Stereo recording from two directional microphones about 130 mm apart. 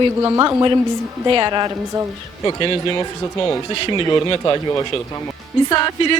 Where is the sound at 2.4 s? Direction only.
35° left (ahead or behind).